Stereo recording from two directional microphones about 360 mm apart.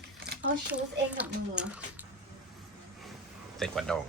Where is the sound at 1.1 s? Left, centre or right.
Centre.